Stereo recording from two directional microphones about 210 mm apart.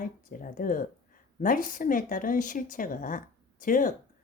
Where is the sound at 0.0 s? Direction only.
40° left (ahead or behind).